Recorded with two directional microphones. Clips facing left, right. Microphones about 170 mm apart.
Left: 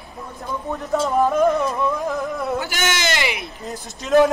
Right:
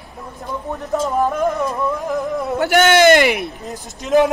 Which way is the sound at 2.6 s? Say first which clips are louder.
Right 12 dB; 60° right (ahead or behind).